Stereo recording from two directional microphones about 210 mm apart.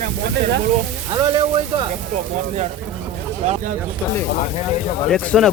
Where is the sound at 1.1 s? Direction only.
20° right (ahead or behind).